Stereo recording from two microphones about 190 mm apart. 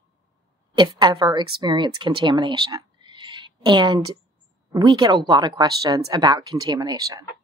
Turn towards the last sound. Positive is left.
turn(degrees=-20)  # may be behind; listen again after turning